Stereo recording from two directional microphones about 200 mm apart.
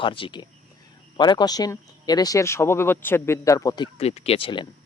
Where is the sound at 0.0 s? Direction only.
25° left (ahead or behind).